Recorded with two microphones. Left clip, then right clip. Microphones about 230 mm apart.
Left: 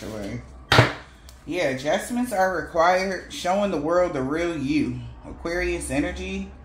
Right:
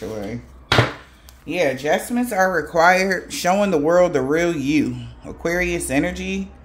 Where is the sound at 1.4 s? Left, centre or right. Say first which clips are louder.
Right 4 dB; right.